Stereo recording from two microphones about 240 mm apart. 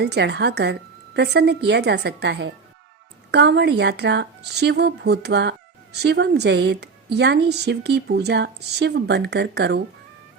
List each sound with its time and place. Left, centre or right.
0.0 s a woman's voice: right